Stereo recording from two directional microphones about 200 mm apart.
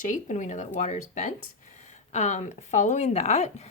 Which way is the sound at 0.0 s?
40° left (ahead or behind).